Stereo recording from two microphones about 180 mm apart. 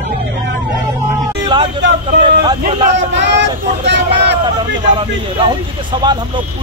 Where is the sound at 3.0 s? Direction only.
75° right (ahead or behind).